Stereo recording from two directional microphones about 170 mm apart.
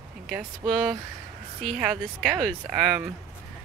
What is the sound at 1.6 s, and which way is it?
Speech, centre (ahead or behind).